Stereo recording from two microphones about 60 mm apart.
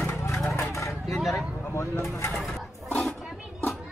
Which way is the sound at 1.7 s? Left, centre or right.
Left.